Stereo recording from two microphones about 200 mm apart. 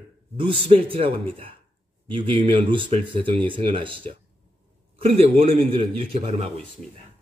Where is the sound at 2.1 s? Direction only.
25° right (ahead or behind).